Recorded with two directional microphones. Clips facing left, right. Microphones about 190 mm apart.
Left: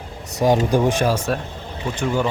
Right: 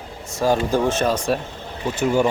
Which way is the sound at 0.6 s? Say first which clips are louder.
Left 1 dB; 15° left (ahead or behind).